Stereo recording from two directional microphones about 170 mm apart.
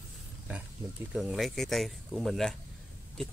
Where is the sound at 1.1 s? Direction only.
Centre (ahead or behind).